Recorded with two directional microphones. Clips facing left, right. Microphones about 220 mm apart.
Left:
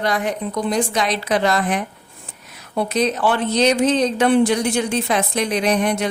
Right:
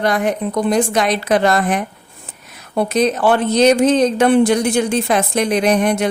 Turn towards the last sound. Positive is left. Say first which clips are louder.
# right 4 dB
turn(degrees=-50)  # may be behind; listen again after turning